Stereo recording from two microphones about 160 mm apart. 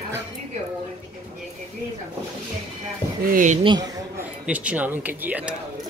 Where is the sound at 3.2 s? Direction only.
55° right (ahead or behind).